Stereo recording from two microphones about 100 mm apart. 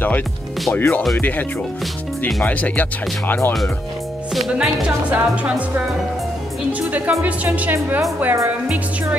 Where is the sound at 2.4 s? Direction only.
15° left (ahead or behind).